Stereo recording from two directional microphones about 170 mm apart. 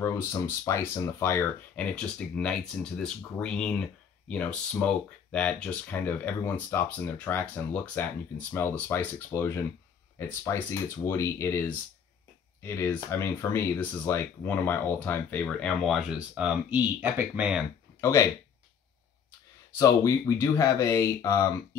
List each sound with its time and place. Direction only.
0.0 s speech: 15° left (ahead or behind); by 17.6 s 5° right (ahead or behind)
18.0 s speech: 20° left (ahead or behind)
19.8 s speech: 20° left (ahead or behind)